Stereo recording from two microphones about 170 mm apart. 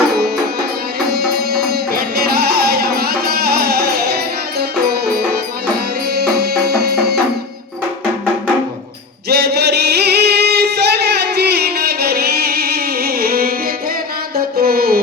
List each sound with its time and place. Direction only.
1.1 s music: 70° right (ahead or behind)
9.3 s singing: 70° right (ahead or behind)
14.3 s mantra: 65° right (ahead or behind)